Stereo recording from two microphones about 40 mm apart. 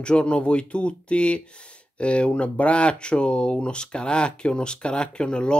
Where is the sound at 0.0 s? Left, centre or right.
Left.